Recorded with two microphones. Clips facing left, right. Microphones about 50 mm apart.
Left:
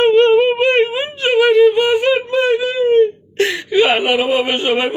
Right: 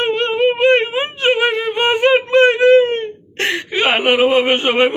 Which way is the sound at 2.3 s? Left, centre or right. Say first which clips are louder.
Right 6 dB; right.